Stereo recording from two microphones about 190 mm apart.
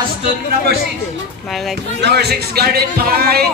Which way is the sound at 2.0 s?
60° right (ahead or behind).